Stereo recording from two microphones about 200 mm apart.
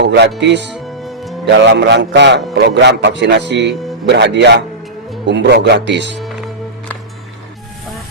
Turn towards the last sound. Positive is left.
turn(degrees=-60)  # may be behind; listen again after turning